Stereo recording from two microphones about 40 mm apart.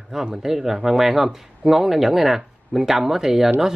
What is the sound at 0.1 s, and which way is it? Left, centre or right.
Speech, centre.